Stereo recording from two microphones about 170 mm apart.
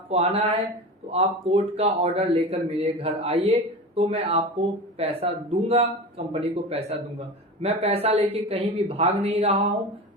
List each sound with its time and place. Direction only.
0.1 s a man's voice: 40° right (ahead or behind)